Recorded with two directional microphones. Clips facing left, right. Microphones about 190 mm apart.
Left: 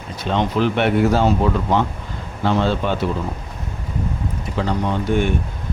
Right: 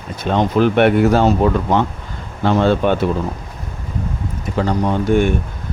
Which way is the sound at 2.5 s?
55° right (ahead or behind).